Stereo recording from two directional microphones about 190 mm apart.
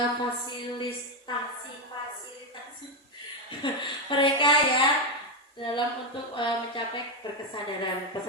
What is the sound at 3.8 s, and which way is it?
Speech, 25° left (ahead or behind).